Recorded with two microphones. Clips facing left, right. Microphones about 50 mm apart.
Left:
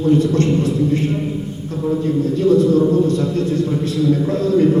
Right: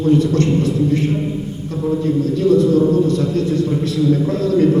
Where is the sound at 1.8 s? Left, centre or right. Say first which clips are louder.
Even; left.